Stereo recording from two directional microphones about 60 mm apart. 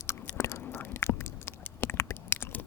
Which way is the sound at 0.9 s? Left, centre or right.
Left.